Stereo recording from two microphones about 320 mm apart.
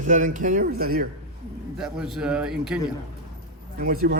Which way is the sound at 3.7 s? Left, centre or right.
Right.